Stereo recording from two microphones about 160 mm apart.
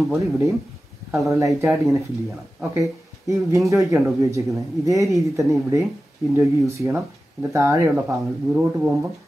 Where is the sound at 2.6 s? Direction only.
20° right (ahead or behind).